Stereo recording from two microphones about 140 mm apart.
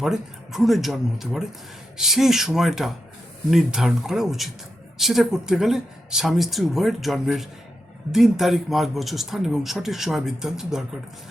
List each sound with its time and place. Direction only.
0.0 s speech: 5° right (ahead or behind)